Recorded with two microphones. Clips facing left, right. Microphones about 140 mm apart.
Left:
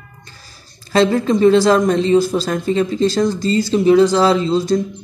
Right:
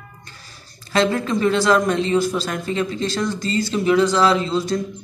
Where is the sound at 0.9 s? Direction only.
30° left (ahead or behind).